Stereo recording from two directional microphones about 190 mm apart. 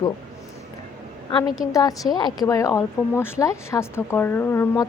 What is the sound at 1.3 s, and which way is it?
A woman's voice, 25° left (ahead or behind).